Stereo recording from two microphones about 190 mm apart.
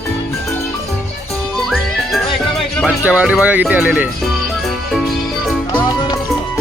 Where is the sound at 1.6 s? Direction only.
Centre (ahead or behind).